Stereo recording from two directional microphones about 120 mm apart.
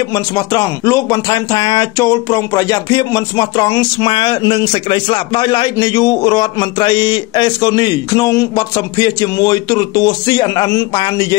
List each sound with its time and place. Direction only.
0.0 s a man's voice: 30° left (ahead or behind)
4.1 s a man's voice: 40° left (ahead or behind)